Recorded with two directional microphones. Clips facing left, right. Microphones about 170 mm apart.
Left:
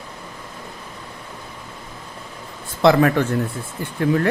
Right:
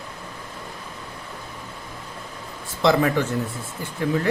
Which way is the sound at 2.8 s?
60° left (ahead or behind).